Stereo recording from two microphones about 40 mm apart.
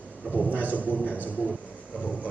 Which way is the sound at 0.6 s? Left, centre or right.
Right.